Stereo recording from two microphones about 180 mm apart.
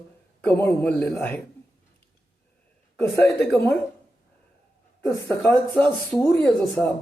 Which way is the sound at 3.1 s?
15° left (ahead or behind).